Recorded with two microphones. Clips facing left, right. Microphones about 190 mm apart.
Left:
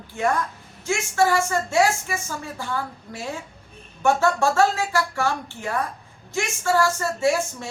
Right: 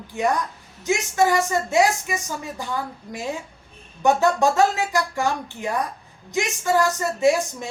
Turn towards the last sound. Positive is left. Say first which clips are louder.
# right 3 dB
turn(degrees=-15)  # may be behind; listen again after turning